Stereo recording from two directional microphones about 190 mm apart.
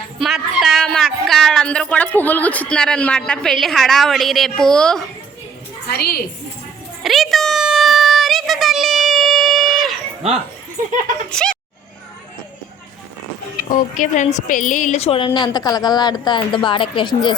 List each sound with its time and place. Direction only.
0.2 s a woman's voice: centre (ahead or behind)
5.9 s a woman's voice: 55° left (ahead or behind)
7.0 s a sound: centre (ahead or behind)
11.3 s speech: 5° left (ahead or behind)
13.7 s a woman's voice: 45° left (ahead or behind); by 17.3 s 25° left (ahead or behind)